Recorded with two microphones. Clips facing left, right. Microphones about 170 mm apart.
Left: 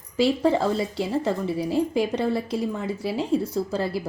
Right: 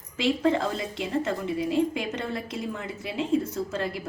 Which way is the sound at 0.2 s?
35° left (ahead or behind).